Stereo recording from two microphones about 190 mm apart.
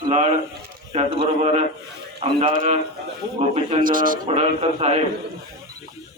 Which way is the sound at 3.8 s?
45° right (ahead or behind).